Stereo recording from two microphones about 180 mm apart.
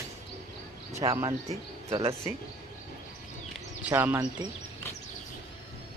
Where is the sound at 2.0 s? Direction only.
30° right (ahead or behind).